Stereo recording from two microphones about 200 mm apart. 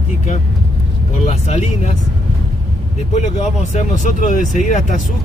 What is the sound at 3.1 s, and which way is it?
Speech, 35° left (ahead or behind).